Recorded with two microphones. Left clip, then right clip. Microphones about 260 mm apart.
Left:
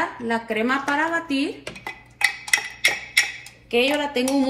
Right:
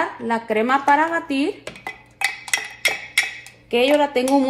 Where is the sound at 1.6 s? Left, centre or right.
Centre.